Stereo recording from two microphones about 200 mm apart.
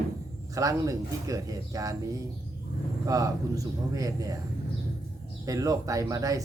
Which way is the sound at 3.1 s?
15° right (ahead or behind).